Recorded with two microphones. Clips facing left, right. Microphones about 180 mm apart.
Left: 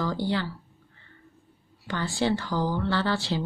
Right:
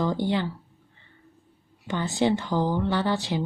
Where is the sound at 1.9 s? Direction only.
20° right (ahead or behind).